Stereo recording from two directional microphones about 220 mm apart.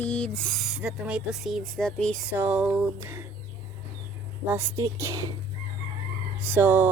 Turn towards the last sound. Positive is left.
turn(degrees=-10)  # may be behind; listen again after turning